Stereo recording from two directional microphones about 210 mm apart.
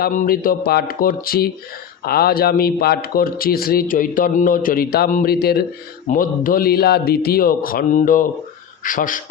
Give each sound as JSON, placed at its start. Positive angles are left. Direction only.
{"t": 0.0, "sound": "a man's voice", "side_deg": 40}